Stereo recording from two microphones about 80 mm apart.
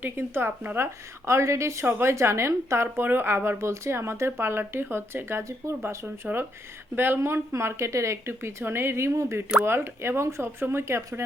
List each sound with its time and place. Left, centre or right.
0.0 s speech: right
1.2 s speech: right
6.9 s speech: right